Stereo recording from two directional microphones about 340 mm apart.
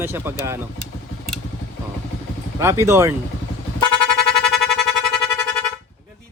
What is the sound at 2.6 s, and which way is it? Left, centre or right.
Speech, centre.